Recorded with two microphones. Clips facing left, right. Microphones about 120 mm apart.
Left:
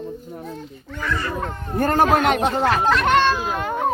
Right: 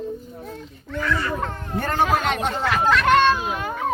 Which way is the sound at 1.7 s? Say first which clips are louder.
Left 4 dB; 45° left (ahead or behind).